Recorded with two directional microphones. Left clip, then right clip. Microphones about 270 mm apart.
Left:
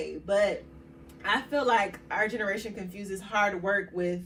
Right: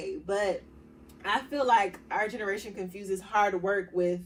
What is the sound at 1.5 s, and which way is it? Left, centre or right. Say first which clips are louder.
A woman's voice: right 2 dB; centre.